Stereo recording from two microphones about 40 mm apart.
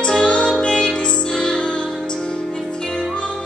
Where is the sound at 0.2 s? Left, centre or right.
Left.